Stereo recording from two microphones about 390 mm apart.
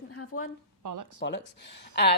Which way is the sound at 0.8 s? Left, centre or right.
Right.